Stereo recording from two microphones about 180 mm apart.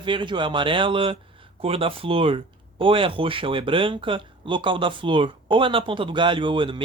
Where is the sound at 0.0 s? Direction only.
25° right (ahead or behind).